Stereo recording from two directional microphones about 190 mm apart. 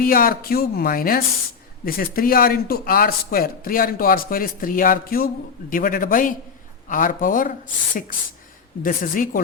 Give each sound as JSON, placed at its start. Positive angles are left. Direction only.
{"t": 0.0, "sound": "speech", "side_deg": 50}
{"t": 8.8, "sound": "speech", "side_deg": 45}